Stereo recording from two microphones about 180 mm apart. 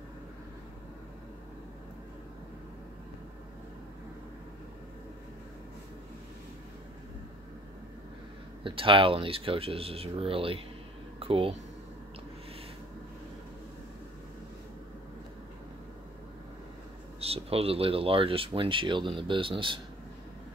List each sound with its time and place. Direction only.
8.6 s speech: 30° right (ahead or behind)
11.1 s a sound: 30° right (ahead or behind)
17.2 s speech: 35° right (ahead or behind)